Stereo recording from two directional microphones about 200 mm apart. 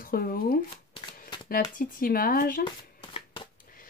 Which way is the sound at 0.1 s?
50° left (ahead or behind).